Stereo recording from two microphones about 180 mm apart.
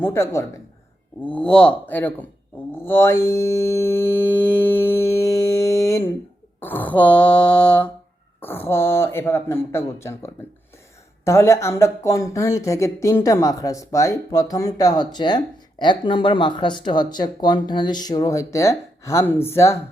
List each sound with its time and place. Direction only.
0.0 s speech: 15° left (ahead or behind)
2.7 s mantra: 10° left (ahead or behind)
6.6 s speech: 10° left (ahead or behind)